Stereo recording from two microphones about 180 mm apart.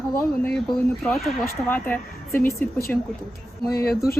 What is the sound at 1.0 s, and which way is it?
Speech, centre (ahead or behind).